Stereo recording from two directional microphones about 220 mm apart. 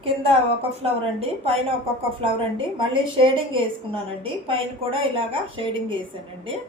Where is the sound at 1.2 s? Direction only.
25° right (ahead or behind).